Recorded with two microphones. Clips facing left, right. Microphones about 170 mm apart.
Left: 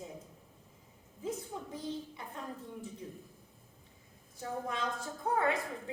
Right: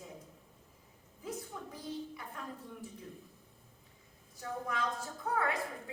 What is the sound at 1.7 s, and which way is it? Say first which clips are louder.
Speech: left 1 dB; 25° left (ahead or behind).